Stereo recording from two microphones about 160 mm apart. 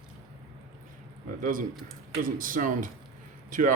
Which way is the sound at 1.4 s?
60° right (ahead or behind).